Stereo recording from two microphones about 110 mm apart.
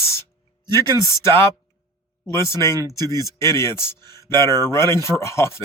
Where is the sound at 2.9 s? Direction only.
35° right (ahead or behind).